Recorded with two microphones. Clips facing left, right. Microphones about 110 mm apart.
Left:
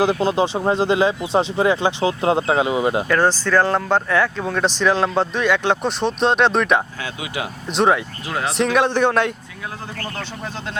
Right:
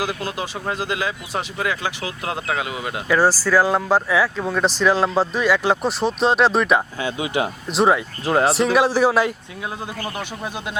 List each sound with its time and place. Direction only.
0.0 s speech: 25° left (ahead or behind)
3.1 s speech: 5° right (ahead or behind)
7.2 s speech: 30° right (ahead or behind)
7.7 s speech: centre (ahead or behind)
8.3 s speech: 40° right (ahead or behind)
8.5 s speech: 5° right (ahead or behind)